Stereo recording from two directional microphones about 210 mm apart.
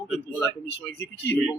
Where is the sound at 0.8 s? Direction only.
10° left (ahead or behind).